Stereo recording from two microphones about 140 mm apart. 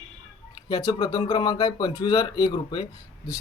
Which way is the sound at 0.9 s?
35° left (ahead or behind).